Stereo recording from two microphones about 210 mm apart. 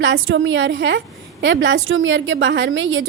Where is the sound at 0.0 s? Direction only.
65° right (ahead or behind).